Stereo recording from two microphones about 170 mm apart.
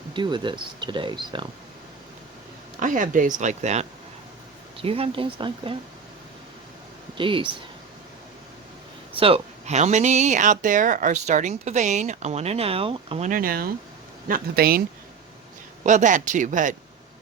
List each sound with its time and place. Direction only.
0.1 s speech: 30° right (ahead or behind)
2.8 s speech: 50° right (ahead or behind); by 5.7 s 30° right (ahead or behind)
7.2 s speech: 30° right (ahead or behind)
9.1 s speech: 35° right (ahead or behind)
13.3 s speech: 60° right (ahead or behind)
15.8 s speech: 45° right (ahead or behind)